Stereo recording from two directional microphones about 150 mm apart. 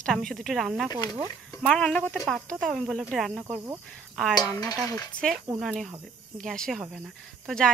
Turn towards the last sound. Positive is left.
turn(degrees=5)  # may be behind; listen again after turning